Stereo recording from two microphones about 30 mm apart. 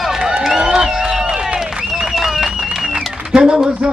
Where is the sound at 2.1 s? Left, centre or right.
Centre.